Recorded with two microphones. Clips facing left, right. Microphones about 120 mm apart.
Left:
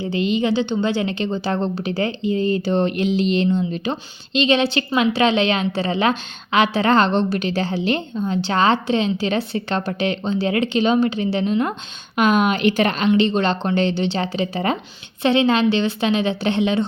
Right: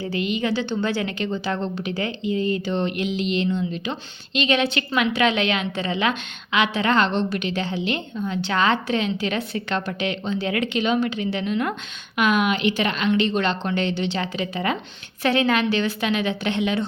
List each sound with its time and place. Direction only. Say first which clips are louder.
0.0 s a woman's voice: left 4 dB; 25° left (ahead or behind)
13.1 s a woman's voice: left 4 dB; 30° left (ahead or behind)